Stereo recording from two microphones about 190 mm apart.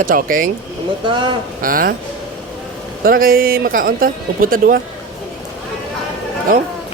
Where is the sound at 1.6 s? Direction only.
50° right (ahead or behind).